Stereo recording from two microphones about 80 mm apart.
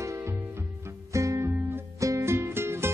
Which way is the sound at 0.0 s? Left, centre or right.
Right.